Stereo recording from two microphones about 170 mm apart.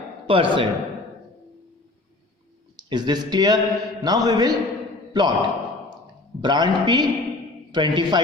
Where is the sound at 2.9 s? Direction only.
25° right (ahead or behind).